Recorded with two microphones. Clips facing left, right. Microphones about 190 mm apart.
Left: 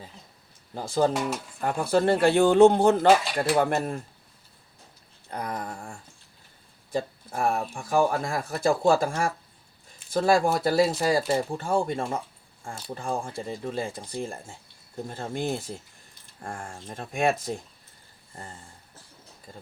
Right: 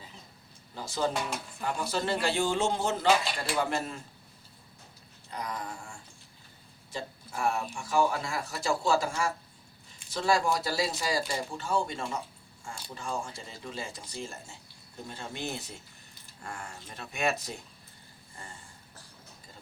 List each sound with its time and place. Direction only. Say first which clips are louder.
0.7 s speech: left 7 dB; 50° left (ahead or behind)
1.1 s speech: left 5 dB; centre (ahead or behind)
1.6 s speech: left 9 dB; 55° left (ahead or behind)
5.3 s speech: left 4 dB; 55° left (ahead or behind)